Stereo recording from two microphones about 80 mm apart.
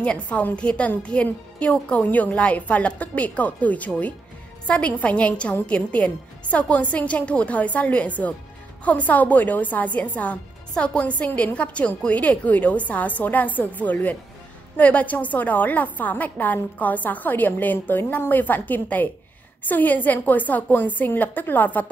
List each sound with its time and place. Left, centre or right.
0.0 s a woman's voice: centre